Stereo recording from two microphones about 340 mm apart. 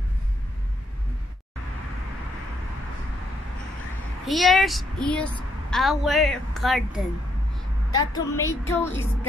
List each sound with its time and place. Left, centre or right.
4.3 s a woman's voice: centre
8.1 s speech: centre